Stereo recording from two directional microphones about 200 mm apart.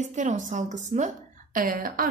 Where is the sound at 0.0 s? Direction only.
35° right (ahead or behind).